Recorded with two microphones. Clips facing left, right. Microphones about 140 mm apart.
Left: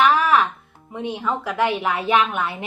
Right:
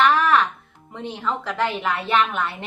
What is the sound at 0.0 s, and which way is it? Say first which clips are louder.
Music: left 1 dB; 10° left (ahead or behind).